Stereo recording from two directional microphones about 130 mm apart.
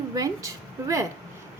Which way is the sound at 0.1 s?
25° right (ahead or behind).